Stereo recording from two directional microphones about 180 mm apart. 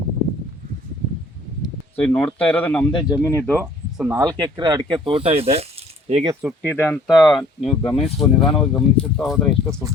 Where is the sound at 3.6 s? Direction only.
10° right (ahead or behind); by 5.7 s 35° right (ahead or behind).